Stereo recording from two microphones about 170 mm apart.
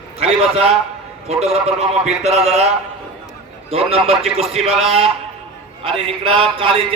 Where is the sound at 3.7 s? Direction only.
35° right (ahead or behind).